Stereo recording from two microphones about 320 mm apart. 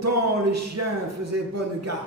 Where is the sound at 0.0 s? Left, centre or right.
Right.